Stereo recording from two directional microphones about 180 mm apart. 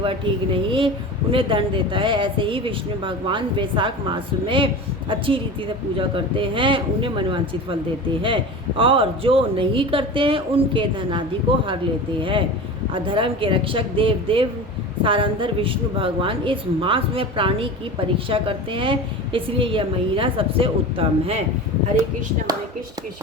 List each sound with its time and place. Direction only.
0.0 s speech: 30° right (ahead or behind)
8.8 s speech: 30° right (ahead or behind)
12.2 s speech: 30° right (ahead or behind)